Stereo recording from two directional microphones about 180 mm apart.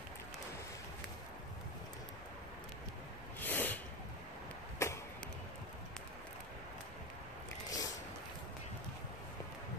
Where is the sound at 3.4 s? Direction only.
10° left (ahead or behind).